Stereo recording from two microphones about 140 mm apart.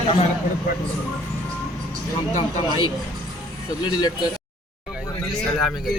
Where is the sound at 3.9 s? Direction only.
30° left (ahead or behind).